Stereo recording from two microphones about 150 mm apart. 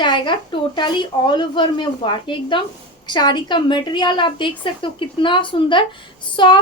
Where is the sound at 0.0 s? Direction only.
30° left (ahead or behind).